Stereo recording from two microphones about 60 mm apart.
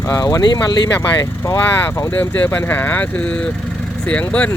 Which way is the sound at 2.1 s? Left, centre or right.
Left.